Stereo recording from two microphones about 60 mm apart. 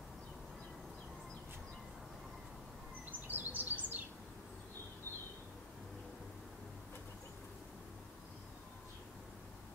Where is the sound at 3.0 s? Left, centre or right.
Right.